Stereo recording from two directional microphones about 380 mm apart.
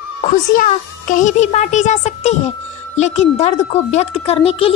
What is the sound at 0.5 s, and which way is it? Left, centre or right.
A woman's voice, centre.